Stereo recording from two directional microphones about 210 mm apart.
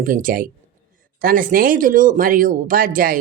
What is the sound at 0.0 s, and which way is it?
Speech, 40° right (ahead or behind).